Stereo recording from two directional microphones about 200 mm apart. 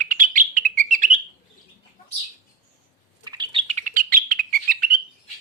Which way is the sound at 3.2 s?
20° right (ahead or behind).